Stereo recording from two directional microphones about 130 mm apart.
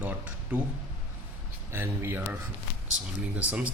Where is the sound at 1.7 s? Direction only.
20° right (ahead or behind).